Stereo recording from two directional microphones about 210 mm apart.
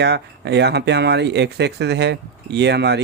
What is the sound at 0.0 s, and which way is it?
Speech, 55° right (ahead or behind).